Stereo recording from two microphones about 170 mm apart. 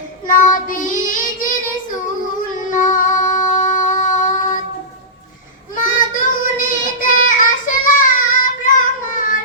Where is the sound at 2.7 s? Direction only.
50° left (ahead or behind).